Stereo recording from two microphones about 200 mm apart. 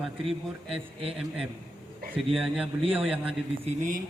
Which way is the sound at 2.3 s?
5° right (ahead or behind).